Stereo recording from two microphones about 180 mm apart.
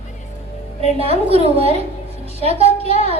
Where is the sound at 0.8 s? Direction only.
35° right (ahead or behind).